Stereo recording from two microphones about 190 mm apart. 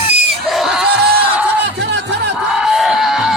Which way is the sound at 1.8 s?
65° right (ahead or behind).